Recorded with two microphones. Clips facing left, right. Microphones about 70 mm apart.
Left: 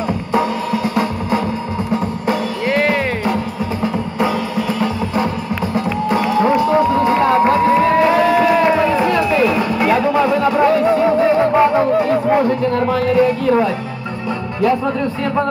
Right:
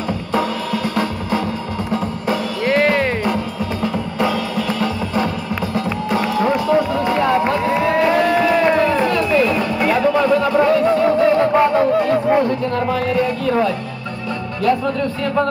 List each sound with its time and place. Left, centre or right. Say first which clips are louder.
2.6 s music: right 2 dB; centre
6.6 s run: left 3 dB; left
7.1 s music: left 3 dB; left
7.7 s run: left 3 dB; centre
12.8 s music: left 5 dB; centre